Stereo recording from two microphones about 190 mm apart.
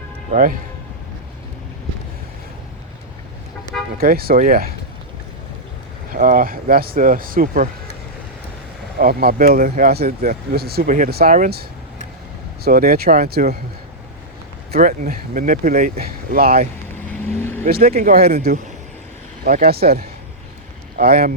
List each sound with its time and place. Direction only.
0.3 s speech: 45° right (ahead or behind)
3.9 s speech: 50° right (ahead or behind)
6.1 s speech: 45° right (ahead or behind)
9.0 s speech: 50° right (ahead or behind)
12.6 s speech: 50° right (ahead or behind)
14.7 s speech: 45° right (ahead or behind)
17.2 s vehicle: 10° left (ahead or behind)
17.7 s speech: 55° right (ahead or behind)
18.4 s speech: 45° right (ahead or behind)